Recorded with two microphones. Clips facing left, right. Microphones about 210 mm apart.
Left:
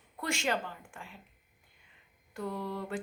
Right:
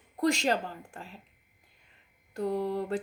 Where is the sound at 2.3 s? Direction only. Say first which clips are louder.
Right 7 dB; 35° right (ahead or behind).